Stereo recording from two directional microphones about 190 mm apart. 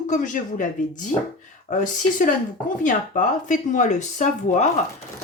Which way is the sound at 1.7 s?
40° left (ahead or behind).